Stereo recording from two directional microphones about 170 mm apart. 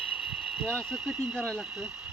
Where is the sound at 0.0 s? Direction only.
5° right (ahead or behind).